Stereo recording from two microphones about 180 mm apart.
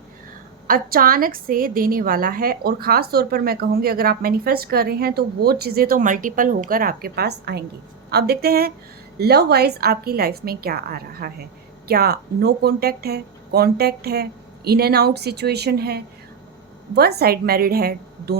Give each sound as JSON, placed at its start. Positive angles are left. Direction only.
{"t": 0.7, "sound": "a woman's voice", "side_deg": -55}